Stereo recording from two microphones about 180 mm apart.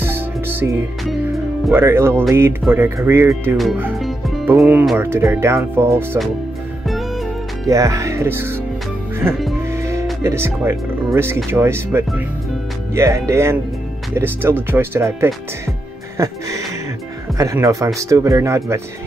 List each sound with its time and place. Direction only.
0.0 s music: 10° right (ahead or behind)
1.0 s music: centre (ahead or behind)
1.7 s speech: 15° right (ahead or behind)
3.5 s speech: centre (ahead or behind)
3.9 s music: centre (ahead or behind)
4.6 s speech: 5° right (ahead or behind)
7.6 s speech: 15° right (ahead or behind)
9.3 s speech: centre (ahead or behind)
9.7 s music: 15° right (ahead or behind)
10.2 s speech: 15° right (ahead or behind)
16.2 s music: 20° right (ahead or behind)
17.4 s speech: 20° right (ahead or behind)